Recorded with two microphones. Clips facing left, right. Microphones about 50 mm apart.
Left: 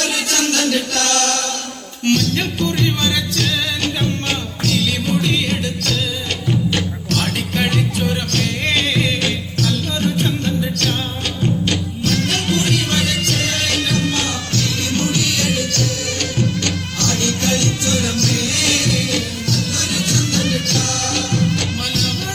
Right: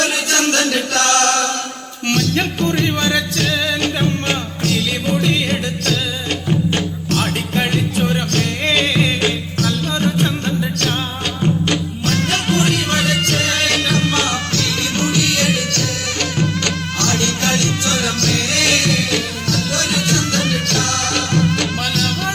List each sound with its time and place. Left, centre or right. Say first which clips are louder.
0.0 s music: right 3 dB; right